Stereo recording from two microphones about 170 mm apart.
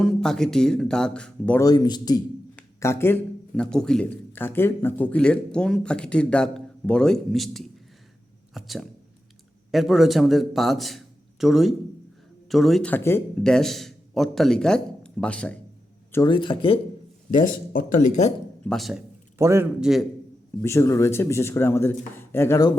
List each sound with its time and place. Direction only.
0.0 s speech: 5° left (ahead or behind)
1.6 s speech: 25° left (ahead or behind); by 15.5 s 5° left (ahead or behind)
16.1 s speech: 25° left (ahead or behind)
17.7 s speech: 55° left (ahead or behind)
18.6 s speech: centre (ahead or behind)
19.4 s a man's voice: 15° right (ahead or behind)
19.8 s speech: centre (ahead or behind)
20.6 s speech: 15° left (ahead or behind)